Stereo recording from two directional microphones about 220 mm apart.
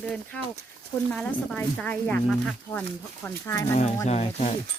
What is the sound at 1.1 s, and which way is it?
Speech, 5° left (ahead or behind).